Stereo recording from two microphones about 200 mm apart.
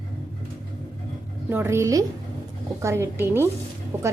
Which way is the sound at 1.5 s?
10° right (ahead or behind).